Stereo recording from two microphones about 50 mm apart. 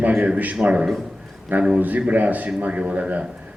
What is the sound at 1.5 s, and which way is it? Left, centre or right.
A man's voice, right.